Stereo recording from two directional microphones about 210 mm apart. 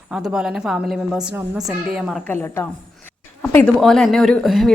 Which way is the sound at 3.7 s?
Centre (ahead or behind).